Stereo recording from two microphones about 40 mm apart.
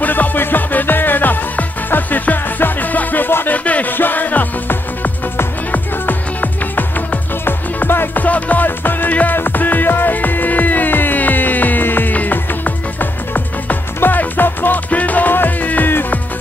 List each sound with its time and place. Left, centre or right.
0.0 s music: left
3.5 s music: left
3.9 s music: left
8.2 s music: left
8.6 s music: left
9.1 s music: left
14.9 s music: left